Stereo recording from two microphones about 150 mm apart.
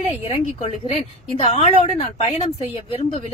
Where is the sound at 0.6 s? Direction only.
45° left (ahead or behind).